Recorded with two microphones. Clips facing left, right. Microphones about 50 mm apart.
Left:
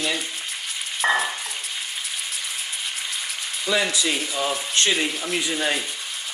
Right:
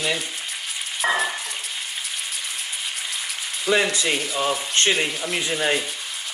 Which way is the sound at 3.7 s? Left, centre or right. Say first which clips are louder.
Right 2 dB; right.